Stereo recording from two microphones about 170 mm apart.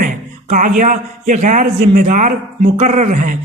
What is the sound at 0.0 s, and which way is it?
A man's voice, 50° right (ahead or behind).